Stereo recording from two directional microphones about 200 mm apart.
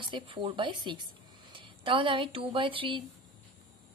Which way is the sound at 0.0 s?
25° right (ahead or behind).